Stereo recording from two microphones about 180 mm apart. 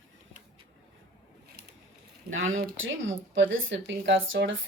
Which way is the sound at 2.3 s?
90° right.